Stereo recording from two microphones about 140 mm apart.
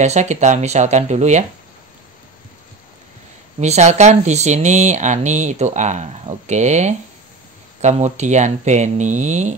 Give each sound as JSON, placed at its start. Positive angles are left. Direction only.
{"t": 0.0, "sound": "speech", "side_deg": -55}
{"t": 3.6, "sound": "speech", "side_deg": -55}